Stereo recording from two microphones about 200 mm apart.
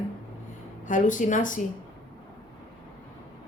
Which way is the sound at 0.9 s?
40° left (ahead or behind).